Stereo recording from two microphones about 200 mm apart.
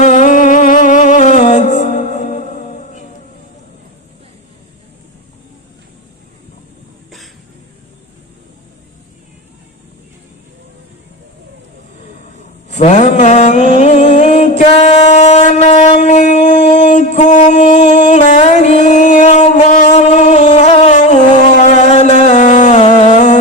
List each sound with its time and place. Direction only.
0.0 s music: 40° left (ahead or behind)
12.7 s mantra: 35° left (ahead or behind)
13.7 s music: 35° left (ahead or behind)